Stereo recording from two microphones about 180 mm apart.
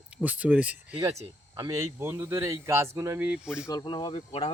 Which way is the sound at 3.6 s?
25° left (ahead or behind).